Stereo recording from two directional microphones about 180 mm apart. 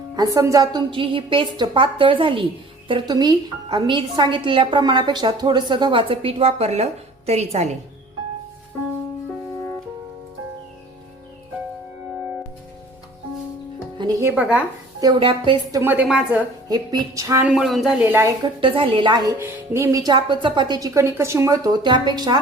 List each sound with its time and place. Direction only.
0.2 s a woman's voice: 20° right (ahead or behind); by 7.7 s 35° right (ahead or behind)
14.0 s music: 15° right (ahead or behind)
15.0 s a woman's voice: 30° right (ahead or behind)
15.8 s a woman's voice: 10° right (ahead or behind)
16.6 s a woman's voice: 20° right (ahead or behind)
17.4 s speech: centre (ahead or behind)
18.4 s a woman's voice: 30° right (ahead or behind)